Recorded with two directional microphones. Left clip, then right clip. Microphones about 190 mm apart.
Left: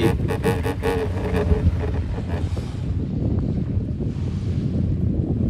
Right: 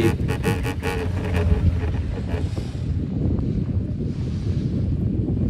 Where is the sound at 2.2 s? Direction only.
30° left (ahead or behind).